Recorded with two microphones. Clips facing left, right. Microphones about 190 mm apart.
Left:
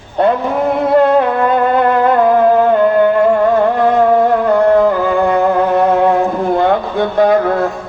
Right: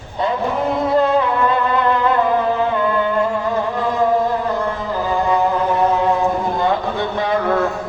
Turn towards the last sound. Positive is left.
turn(degrees=50)  # may be behind; listen again after turning